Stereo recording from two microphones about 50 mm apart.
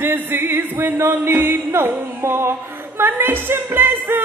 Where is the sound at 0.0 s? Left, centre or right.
Right.